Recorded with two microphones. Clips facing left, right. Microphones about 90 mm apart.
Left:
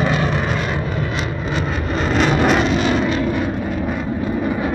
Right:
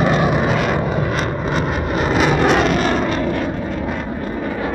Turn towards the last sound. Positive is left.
turn(degrees=-45)  # may be behind; listen again after turning